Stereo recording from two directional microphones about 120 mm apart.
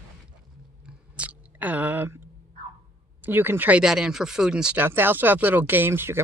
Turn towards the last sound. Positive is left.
turn(degrees=-20)  # may be behind; listen again after turning